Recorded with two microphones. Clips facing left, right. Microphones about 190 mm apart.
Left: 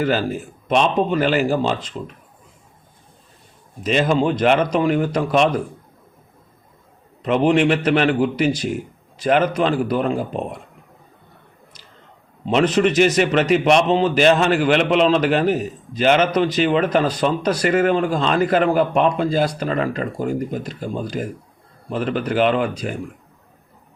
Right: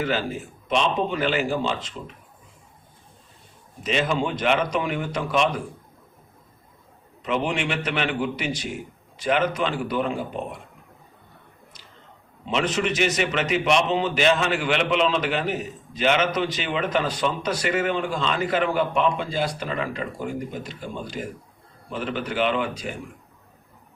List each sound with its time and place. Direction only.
0.0 s a man's voice: 40° left (ahead or behind)
3.8 s a man's voice: 40° left (ahead or behind)
7.2 s a man's voice: 35° left (ahead or behind)
12.5 s a man's voice: 40° left (ahead or behind)